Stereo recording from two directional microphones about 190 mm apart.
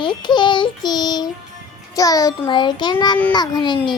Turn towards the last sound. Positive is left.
turn(degrees=25)  # may be behind; listen again after turning